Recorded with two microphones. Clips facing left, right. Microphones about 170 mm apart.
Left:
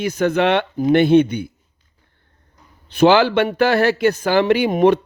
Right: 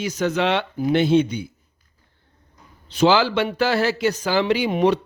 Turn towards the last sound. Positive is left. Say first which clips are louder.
# left 4 dB
turn(degrees=55)  # may be behind; listen again after turning